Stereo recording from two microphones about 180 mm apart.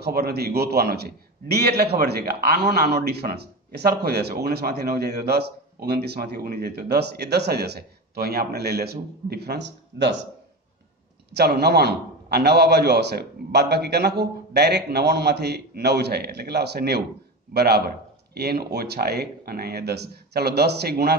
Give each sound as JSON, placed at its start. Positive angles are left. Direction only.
{"t": 0.0, "sound": "a man's voice", "side_deg": -60}
{"t": 11.3, "sound": "a man's voice", "side_deg": -65}